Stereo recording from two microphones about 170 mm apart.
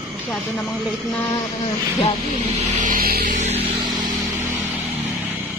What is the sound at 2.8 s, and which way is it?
Music, 60° right (ahead or behind).